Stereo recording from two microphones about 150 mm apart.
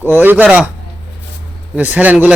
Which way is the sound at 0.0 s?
15° right (ahead or behind).